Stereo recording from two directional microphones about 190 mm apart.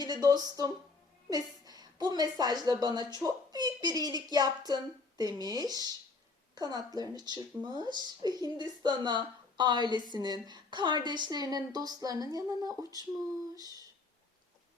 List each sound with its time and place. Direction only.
0.0 s a woman's voice: 20° right (ahead or behind)